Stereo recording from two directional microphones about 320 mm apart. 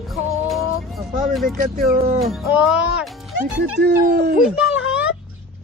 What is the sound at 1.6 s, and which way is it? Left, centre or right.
Speech, right.